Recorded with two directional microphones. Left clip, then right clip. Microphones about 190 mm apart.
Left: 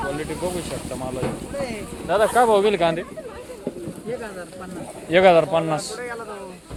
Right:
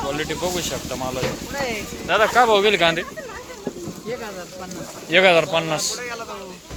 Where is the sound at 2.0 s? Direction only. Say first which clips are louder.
Right 1 dB; 35° left (ahead or behind); by 3.1 s 15° left (ahead or behind).